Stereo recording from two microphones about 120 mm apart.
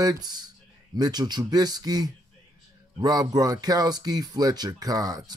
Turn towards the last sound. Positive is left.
turn(degrees=-30)  # may be behind; listen again after turning